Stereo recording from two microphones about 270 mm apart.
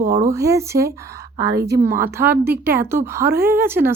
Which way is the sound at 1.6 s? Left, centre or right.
Right.